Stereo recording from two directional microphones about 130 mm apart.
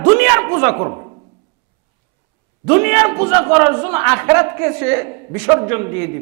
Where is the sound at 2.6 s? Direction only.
20° right (ahead or behind).